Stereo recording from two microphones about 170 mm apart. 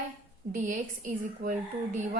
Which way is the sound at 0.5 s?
50° right (ahead or behind).